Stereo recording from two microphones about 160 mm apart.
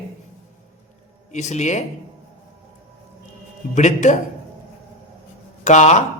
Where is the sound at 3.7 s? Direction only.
50° left (ahead or behind).